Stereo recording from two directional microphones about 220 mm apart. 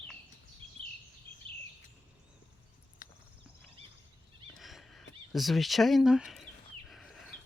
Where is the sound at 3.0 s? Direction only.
40° left (ahead or behind).